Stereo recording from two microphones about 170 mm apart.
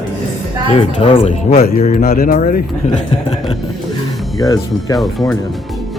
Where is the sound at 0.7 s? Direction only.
35° left (ahead or behind).